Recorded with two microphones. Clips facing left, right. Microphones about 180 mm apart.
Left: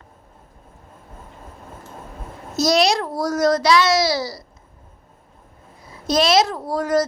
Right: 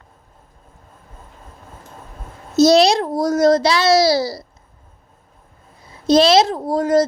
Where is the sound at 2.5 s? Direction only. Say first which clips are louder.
Right 6 dB; 30° right (ahead or behind).